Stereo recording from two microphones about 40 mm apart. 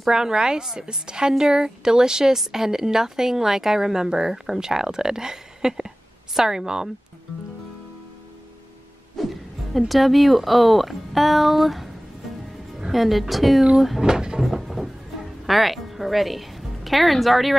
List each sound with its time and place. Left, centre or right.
0.1 s a woman's voice: centre
9.2 s a woman's voice: centre
14.0 s a woman's voice: centre
14.4 s a sound: centre
15.4 s a woman's voice: centre